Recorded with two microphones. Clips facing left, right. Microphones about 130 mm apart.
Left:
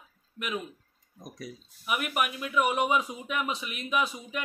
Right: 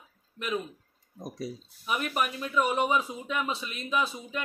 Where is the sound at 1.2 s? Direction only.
30° right (ahead or behind).